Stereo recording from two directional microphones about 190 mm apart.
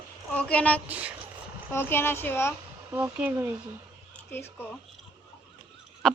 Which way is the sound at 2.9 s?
10° right (ahead or behind).